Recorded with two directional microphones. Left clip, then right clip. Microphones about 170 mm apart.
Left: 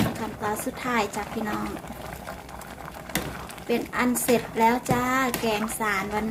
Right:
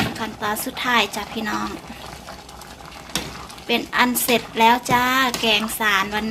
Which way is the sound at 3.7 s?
15° right (ahead or behind).